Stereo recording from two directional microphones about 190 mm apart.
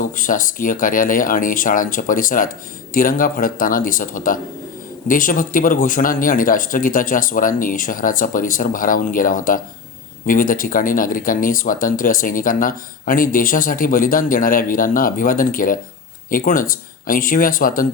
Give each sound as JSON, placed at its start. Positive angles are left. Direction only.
{"t": 0.0, "sound": "speech", "side_deg": 45}